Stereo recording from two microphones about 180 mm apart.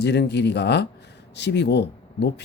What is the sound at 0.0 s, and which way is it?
Speech, 70° left (ahead or behind).